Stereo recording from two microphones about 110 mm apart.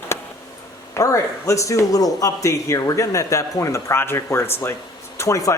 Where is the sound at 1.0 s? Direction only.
30° left (ahead or behind).